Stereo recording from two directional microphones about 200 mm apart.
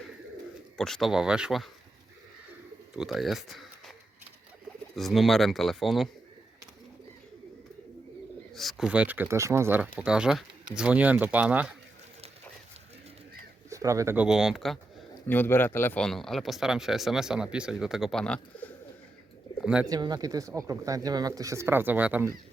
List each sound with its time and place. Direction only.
0.8 s speech: centre (ahead or behind)
2.9 s speech: centre (ahead or behind)
4.9 s speech: centre (ahead or behind)
8.5 s speech: centre (ahead or behind)
13.7 s speech: 15° right (ahead or behind); by 18.7 s 5° left (ahead or behind)
19.6 s speech: 5° right (ahead or behind)
19.9 s speech: 20° right (ahead or behind)